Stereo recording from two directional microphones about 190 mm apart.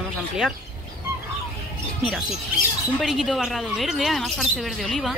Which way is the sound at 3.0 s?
Centre (ahead or behind).